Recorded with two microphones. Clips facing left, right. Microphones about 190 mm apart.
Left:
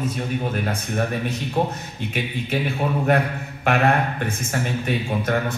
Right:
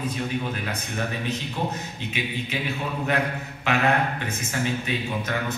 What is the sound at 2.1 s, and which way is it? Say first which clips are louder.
A man's voice: left 5 dB; 50° left (ahead or behind).